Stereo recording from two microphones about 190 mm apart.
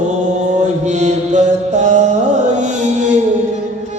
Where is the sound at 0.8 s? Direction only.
40° right (ahead or behind).